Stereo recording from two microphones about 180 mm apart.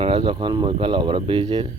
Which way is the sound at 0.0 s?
30° right (ahead or behind).